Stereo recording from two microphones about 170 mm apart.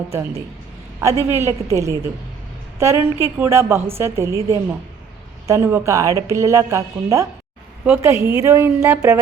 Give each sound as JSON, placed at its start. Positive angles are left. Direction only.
{"t": 0.1, "sound": "a woman's voice", "side_deg": -15}
{"t": 8.2, "sound": "a woman's voice", "side_deg": 30}
{"t": 8.4, "sound": "a woman's voice", "side_deg": -15}